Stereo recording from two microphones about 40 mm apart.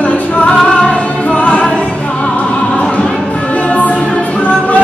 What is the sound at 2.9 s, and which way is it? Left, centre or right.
Music, left.